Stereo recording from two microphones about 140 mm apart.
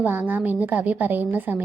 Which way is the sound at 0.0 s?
15° right (ahead or behind).